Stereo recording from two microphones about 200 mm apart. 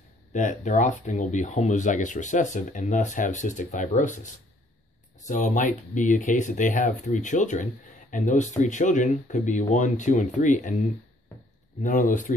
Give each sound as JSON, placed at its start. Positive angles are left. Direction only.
{"t": 0.3, "sound": "speech", "side_deg": 40}
{"t": 11.8, "sound": "speech", "side_deg": 40}